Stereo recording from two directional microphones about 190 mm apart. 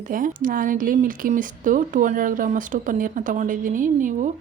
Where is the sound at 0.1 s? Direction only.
45° right (ahead or behind).